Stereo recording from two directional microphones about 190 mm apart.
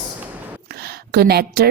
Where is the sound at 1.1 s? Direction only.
55° right (ahead or behind).